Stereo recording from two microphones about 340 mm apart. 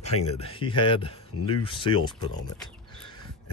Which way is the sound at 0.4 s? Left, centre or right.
Centre.